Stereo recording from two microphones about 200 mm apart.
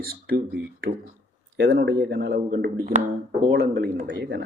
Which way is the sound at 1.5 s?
70° right (ahead or behind).